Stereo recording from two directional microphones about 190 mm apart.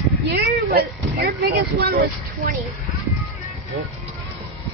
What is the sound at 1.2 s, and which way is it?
Speech, 50° right (ahead or behind).